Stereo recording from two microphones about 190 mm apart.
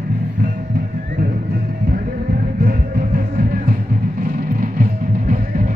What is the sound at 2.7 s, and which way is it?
Music, 50° right (ahead or behind).